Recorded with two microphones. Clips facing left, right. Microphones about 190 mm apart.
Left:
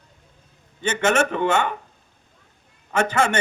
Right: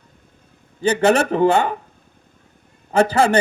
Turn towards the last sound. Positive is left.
turn(degrees=-35)  # may be behind; listen again after turning